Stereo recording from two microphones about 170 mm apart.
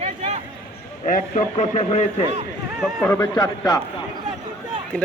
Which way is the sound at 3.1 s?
20° left (ahead or behind).